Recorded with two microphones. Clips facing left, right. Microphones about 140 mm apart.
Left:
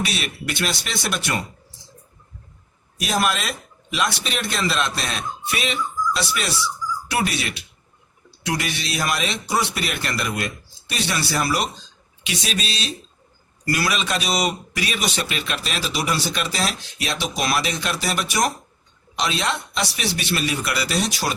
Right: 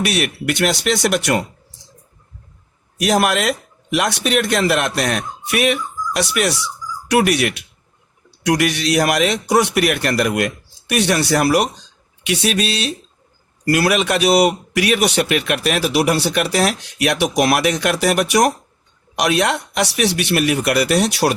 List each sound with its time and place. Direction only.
0.0 s a man's voice: 70° right (ahead or behind)
3.0 s a man's voice: 65° right (ahead or behind)